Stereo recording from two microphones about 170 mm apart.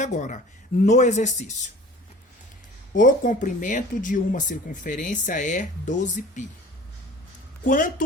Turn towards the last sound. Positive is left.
turn(degrees=50)  # may be behind; listen again after turning